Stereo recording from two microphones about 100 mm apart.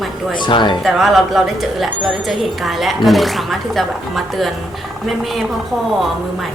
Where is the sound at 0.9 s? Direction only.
Centre (ahead or behind).